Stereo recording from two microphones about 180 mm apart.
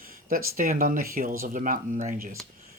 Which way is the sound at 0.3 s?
50° right (ahead or behind).